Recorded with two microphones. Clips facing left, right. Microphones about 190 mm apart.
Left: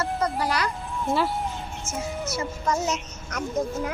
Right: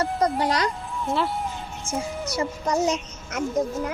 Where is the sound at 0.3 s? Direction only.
30° right (ahead or behind).